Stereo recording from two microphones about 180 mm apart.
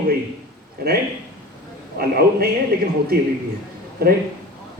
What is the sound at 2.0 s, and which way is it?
Speech, 55° right (ahead or behind).